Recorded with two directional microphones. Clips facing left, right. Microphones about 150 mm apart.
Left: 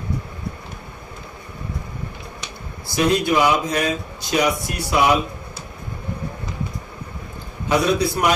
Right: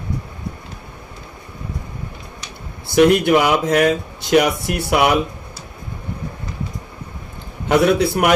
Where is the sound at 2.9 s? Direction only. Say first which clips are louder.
Right 6 dB; 65° right (ahead or behind).